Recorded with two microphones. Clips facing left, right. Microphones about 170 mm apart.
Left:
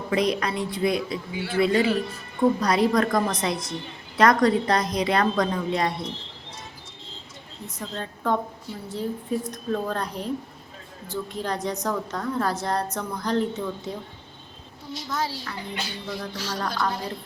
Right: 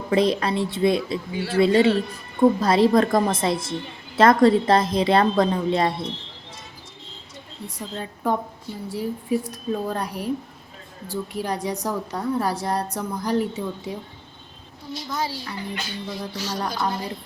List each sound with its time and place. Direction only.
0.1 s a man's voice: 30° right (ahead or behind)
7.8 s a woman's voice: 10° right (ahead or behind)
15.1 s a woman's voice: 10° right (ahead or behind)